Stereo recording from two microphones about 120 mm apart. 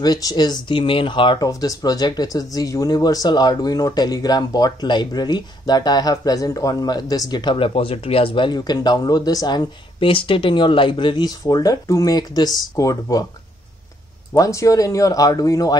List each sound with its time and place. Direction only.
0.0 s speech: 30° left (ahead or behind)
1.5 s speech: 30° left (ahead or behind)
9.9 s speech: 45° left (ahead or behind); by 13.2 s 30° left (ahead or behind)
14.3 s speech: 25° left (ahead or behind)